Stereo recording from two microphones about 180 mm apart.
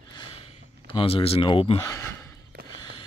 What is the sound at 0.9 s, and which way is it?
Speech, 30° left (ahead or behind).